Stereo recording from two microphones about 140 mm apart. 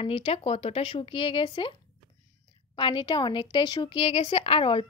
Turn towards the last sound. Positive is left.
turn(degrees=40)  # may be behind; listen again after turning